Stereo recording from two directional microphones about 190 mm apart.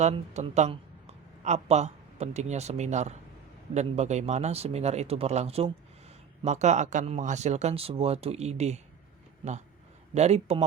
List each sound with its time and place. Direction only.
0.0 s speech: 35° right (ahead or behind)